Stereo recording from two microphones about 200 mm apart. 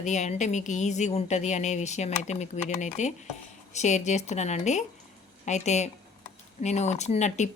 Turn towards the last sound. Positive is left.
turn(degrees=35)  # may be behind; listen again after turning